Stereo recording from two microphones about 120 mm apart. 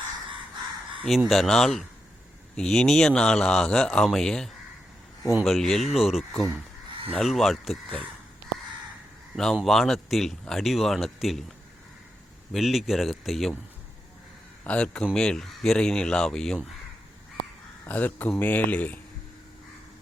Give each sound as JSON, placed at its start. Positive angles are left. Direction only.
{"t": 1.0, "sound": "speech", "side_deg": 0}
{"t": 9.3, "sound": "speech", "side_deg": 0}
{"t": 12.5, "sound": "speech", "side_deg": 0}
{"t": 14.6, "sound": "speech", "side_deg": 10}
{"t": 17.8, "sound": "speech", "side_deg": 15}